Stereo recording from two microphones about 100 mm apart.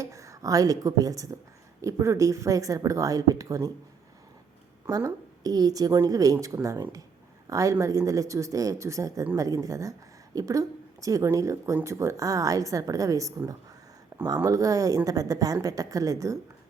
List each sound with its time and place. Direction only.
0.0 s speech: 30° right (ahead or behind)
4.9 s speech: 40° right (ahead or behind)
14.1 s a sound: 40° right (ahead or behind)
14.4 s speech: 35° right (ahead or behind)